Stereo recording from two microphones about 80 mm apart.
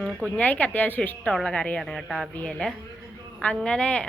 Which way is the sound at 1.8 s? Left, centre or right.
Centre.